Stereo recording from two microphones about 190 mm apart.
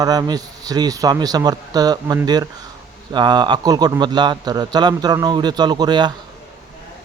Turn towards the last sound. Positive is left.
turn(degrees=-25)  # may be behind; listen again after turning